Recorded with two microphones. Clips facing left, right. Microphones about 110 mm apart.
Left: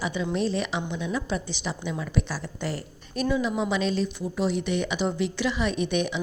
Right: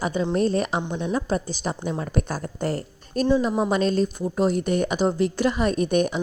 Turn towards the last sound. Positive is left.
turn(degrees=-45)  # may be behind; listen again after turning